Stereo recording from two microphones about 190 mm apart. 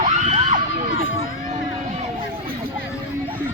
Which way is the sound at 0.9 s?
90° left.